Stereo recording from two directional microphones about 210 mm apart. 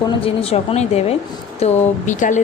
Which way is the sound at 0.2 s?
25° left (ahead or behind).